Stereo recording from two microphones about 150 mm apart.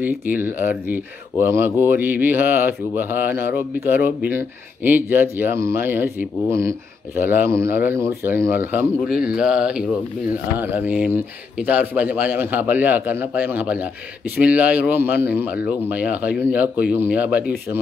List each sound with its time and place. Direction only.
0.3 s speech: 10° right (ahead or behind)